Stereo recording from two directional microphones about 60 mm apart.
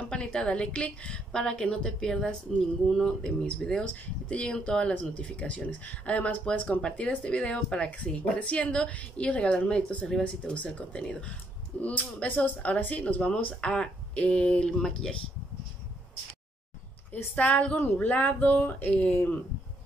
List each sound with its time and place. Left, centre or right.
0.0 s a woman's voice: centre
17.4 s speech: left